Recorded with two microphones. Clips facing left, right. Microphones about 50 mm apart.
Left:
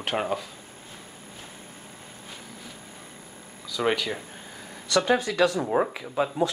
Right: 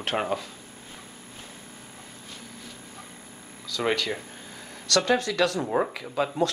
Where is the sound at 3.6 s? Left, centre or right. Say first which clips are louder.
Left 1 dB; centre.